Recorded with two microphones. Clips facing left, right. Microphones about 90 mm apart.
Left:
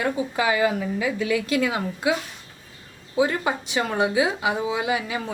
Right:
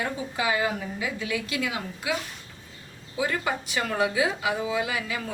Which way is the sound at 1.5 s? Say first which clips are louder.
Left 7 dB; 40° left (ahead or behind).